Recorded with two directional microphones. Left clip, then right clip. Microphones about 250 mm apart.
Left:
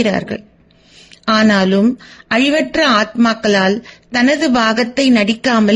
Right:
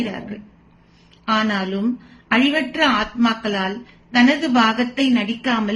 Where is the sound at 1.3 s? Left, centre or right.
Left.